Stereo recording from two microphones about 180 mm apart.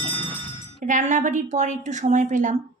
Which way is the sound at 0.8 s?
40° right (ahead or behind).